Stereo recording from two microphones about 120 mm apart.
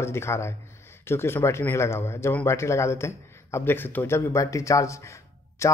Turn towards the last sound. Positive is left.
turn(degrees=25)  # may be behind; listen again after turning